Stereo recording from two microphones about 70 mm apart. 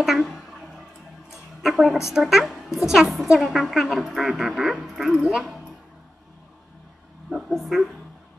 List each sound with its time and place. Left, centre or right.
0.0 s a sound: centre
2.1 s speech: centre
5.4 s music: centre
7.2 s speech: centre